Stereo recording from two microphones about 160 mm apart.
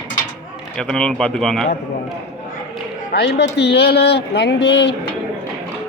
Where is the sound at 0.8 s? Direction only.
5° left (ahead or behind).